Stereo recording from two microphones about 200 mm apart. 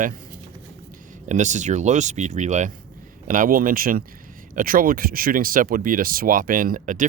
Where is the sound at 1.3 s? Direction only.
35° right (ahead or behind).